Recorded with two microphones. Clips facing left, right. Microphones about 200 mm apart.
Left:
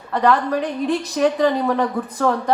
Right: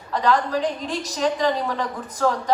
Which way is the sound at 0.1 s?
60° left (ahead or behind).